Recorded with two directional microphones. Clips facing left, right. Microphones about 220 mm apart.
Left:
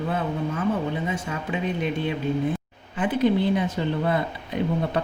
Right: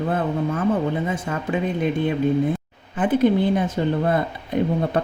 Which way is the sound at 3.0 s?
50° right (ahead or behind).